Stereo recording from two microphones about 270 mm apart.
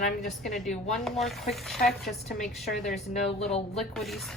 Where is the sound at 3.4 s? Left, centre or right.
Left.